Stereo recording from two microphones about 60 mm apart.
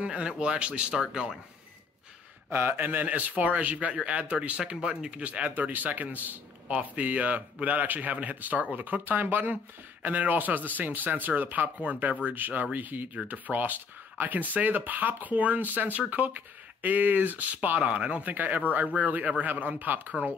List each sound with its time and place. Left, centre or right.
0.0 s speech: centre
2.5 s speech: right